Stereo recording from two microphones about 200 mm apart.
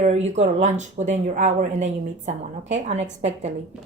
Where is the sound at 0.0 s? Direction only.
35° right (ahead or behind).